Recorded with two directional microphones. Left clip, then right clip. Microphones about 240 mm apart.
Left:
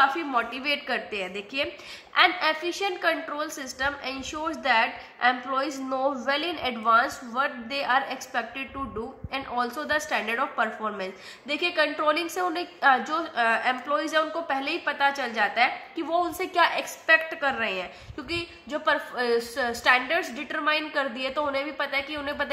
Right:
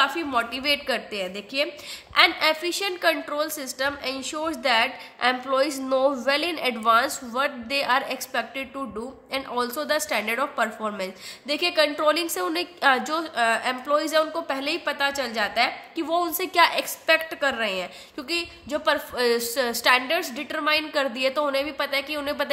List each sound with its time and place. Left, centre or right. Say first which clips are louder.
0.0 s a woman's voice: even; right